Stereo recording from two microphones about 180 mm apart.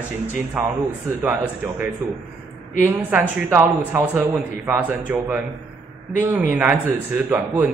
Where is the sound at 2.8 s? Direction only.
10° right (ahead or behind).